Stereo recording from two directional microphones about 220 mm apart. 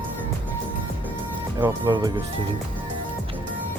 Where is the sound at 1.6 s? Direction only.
15° right (ahead or behind).